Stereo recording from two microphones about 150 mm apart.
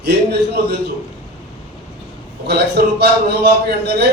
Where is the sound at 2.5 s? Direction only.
90° right.